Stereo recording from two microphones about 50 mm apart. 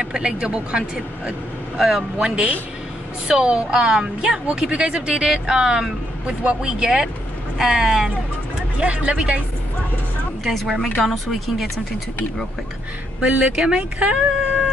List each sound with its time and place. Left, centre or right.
0.0 s speech: centre
8.7 s speech: right
10.4 s speech: centre
13.2 s speech: centre